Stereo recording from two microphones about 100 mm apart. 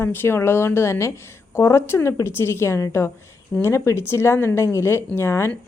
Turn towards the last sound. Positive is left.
turn(degrees=25)  # may be behind; listen again after turning